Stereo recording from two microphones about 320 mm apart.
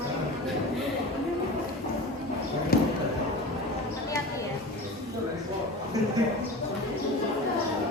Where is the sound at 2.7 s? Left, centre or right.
Left.